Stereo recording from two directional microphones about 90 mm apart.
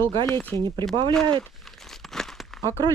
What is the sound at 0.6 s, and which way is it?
Speech, 55° right (ahead or behind).